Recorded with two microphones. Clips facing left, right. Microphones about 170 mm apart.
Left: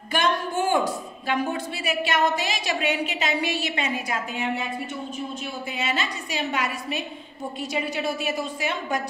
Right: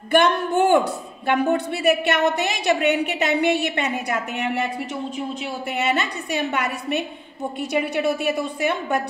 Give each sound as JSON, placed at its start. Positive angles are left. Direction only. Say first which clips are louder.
{"t": 0.1, "sound": "a woman's voice", "louder": "right 6 dB", "side_deg": -60}